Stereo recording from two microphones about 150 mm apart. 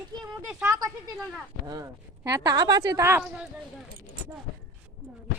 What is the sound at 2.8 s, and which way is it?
Speech, 15° right (ahead or behind).